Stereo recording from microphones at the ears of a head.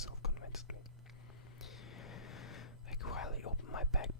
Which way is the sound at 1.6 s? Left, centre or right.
Left.